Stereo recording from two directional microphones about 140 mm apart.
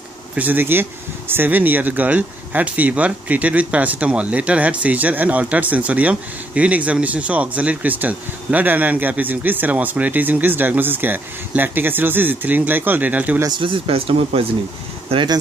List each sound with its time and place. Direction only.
0.4 s speech: 15° right (ahead or behind)
13.4 s speech: 35° right (ahead or behind)